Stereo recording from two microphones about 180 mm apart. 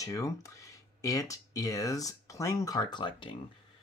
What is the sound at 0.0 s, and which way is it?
Speech, 20° left (ahead or behind).